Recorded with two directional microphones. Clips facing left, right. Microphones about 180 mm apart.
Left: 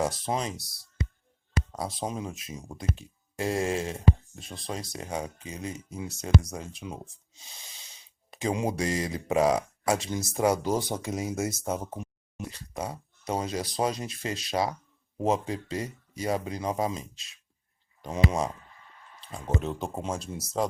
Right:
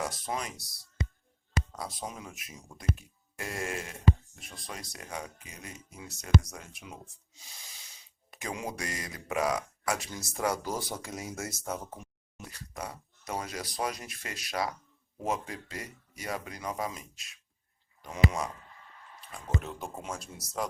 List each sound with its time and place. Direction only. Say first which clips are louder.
0.0 s speech: left 6 dB; 25° left (ahead or behind)
1.7 s speech: left 7 dB; 30° left (ahead or behind)